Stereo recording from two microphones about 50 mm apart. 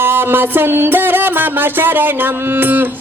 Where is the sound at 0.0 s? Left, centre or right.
Right.